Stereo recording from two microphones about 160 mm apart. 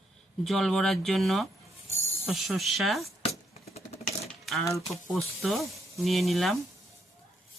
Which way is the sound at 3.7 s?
40° left (ahead or behind).